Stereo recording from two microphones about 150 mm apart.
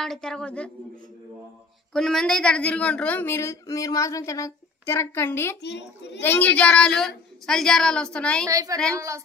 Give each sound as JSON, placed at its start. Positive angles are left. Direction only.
{"t": 0.0, "sound": "speech", "side_deg": 5}
{"t": 2.0, "sound": "a woman's voice", "side_deg": 5}
{"t": 8.5, "sound": "a woman's voice", "side_deg": -25}